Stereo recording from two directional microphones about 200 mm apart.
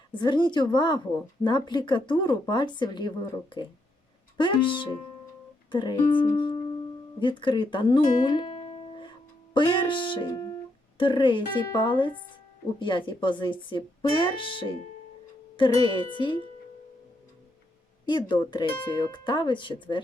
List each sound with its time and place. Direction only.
0.1 s speech: 25° left (ahead or behind)
18.0 s speech: 20° left (ahead or behind)